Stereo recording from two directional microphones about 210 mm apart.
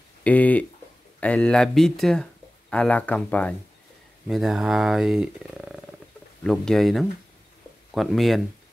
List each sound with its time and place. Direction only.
0.2 s speech: 5° left (ahead or behind)